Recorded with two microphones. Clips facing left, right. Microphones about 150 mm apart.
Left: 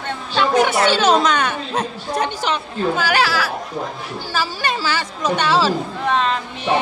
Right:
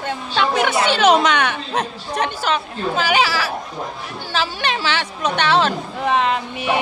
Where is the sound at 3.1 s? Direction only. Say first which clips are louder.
Right 3 dB; 10° right (ahead or behind).